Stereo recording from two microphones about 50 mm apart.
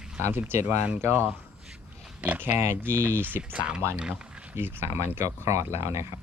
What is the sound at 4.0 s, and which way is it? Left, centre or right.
Speech, centre.